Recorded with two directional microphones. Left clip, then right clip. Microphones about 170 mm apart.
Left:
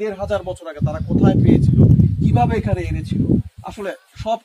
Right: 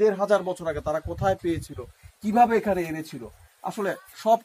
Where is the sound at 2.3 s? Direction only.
5° right (ahead or behind).